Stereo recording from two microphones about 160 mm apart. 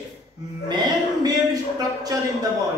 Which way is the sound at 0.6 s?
25° right (ahead or behind).